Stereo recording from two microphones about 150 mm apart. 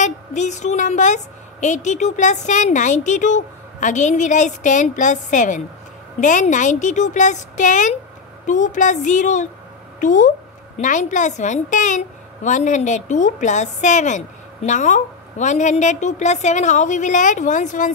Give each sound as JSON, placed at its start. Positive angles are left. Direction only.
{"t": 0.0, "sound": "a woman's voice", "side_deg": 50}